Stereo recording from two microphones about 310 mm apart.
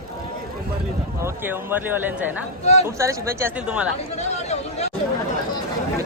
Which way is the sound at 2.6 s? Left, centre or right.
Left.